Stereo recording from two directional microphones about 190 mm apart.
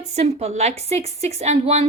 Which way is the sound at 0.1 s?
35° right (ahead or behind).